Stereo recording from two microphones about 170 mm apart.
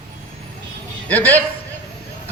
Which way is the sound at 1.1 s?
10° left (ahead or behind).